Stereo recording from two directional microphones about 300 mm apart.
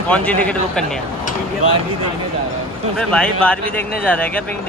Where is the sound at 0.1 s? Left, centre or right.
Centre.